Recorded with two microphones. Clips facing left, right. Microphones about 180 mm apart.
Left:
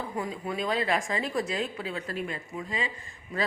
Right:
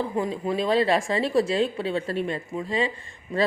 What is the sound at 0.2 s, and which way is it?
Speech, 30° right (ahead or behind).